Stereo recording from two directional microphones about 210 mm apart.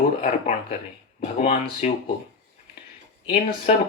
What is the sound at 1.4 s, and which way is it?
Speech, 30° left (ahead or behind).